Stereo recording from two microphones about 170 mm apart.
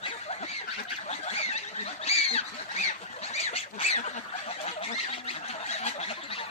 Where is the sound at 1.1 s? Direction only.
40° left (ahead or behind).